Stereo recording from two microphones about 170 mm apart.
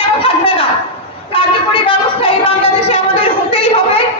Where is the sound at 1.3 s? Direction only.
30° left (ahead or behind).